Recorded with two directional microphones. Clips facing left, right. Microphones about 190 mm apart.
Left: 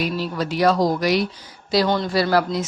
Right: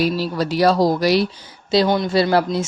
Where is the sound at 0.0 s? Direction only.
35° right (ahead or behind).